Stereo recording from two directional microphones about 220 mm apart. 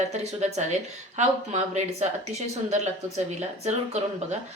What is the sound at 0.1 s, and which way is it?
Speech, 30° right (ahead or behind).